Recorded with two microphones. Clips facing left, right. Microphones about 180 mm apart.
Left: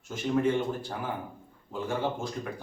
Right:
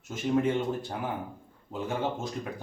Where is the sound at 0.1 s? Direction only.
20° right (ahead or behind).